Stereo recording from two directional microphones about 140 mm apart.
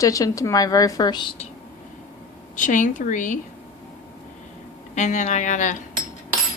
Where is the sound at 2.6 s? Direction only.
65° left (ahead or behind).